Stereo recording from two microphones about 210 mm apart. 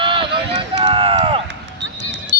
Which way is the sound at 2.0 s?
55° right (ahead or behind).